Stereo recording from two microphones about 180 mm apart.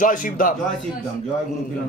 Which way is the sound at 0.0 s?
50° left (ahead or behind).